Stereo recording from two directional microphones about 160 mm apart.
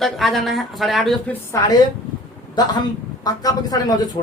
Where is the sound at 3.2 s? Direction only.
25° left (ahead or behind).